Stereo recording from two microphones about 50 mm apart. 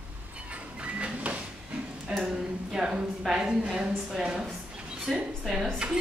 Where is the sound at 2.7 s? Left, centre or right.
Centre.